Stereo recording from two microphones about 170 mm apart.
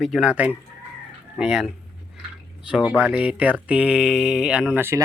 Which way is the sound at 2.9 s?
5° right (ahead or behind).